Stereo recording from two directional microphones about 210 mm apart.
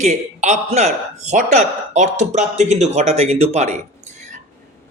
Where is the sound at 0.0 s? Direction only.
35° right (ahead or behind).